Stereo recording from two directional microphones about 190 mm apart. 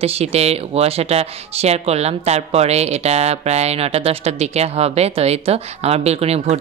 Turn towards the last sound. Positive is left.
turn(degrees=-35)  # may be behind; listen again after turning